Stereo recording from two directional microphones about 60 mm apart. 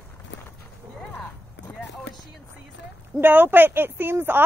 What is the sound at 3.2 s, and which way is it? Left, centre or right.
Speech, right.